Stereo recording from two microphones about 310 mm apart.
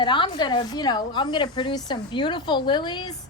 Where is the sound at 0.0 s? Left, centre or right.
Centre.